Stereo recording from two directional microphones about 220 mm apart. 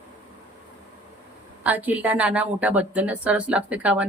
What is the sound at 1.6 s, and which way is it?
A woman's voice, 5° right (ahead or behind).